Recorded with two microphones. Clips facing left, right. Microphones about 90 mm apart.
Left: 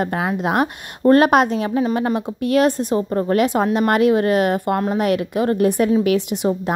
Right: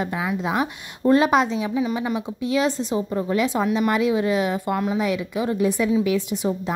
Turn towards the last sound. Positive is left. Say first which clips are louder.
# left 4 dB
turn(degrees=70)  # may be behind; listen again after turning